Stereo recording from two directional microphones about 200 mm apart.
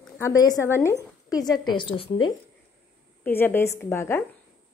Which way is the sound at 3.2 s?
10° left (ahead or behind).